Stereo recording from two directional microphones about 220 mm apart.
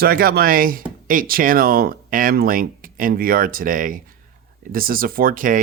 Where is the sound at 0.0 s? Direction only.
40° right (ahead or behind).